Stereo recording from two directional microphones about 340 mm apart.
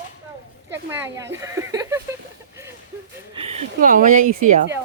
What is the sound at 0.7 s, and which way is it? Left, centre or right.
Speech, centre.